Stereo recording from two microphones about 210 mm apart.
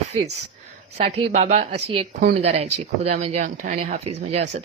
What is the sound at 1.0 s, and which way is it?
Speech, 35° right (ahead or behind).